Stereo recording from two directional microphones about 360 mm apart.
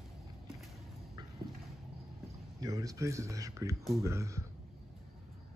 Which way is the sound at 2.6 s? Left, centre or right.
Centre.